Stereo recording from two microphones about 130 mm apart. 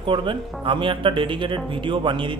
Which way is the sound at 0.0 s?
40° right (ahead or behind).